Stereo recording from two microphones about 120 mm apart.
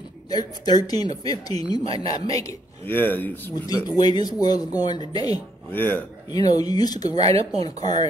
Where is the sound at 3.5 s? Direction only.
30° left (ahead or behind).